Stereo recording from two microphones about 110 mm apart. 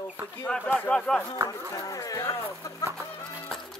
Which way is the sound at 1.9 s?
35° left (ahead or behind).